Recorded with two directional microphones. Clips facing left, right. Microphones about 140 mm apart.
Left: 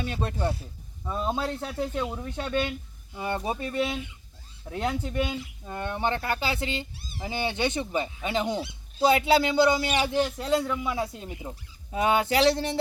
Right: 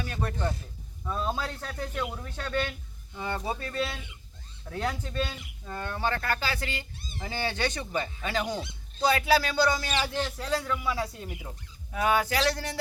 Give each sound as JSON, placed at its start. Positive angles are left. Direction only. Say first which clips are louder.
{"t": 0.0, "sound": "a man's voice", "louder": "left 3 dB", "side_deg": 25}
{"t": 7.0, "sound": "speech", "louder": "left 1 dB", "side_deg": 10}
{"t": 7.3, "sound": "a man's voice", "louder": "left 3 dB", "side_deg": 20}